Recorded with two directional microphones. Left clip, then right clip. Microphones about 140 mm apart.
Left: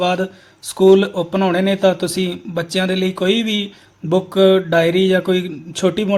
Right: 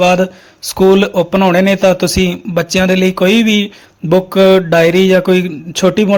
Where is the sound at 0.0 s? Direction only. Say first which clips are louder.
Right 8 dB; 40° right (ahead or behind).